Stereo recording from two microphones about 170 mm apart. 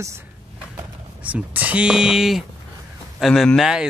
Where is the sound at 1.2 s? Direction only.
10° right (ahead or behind).